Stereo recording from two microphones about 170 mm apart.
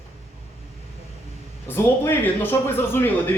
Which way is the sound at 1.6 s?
15° left (ahead or behind).